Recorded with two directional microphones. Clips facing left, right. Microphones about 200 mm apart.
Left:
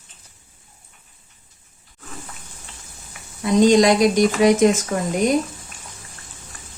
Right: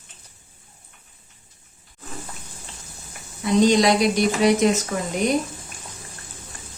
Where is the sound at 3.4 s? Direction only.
50° left (ahead or behind).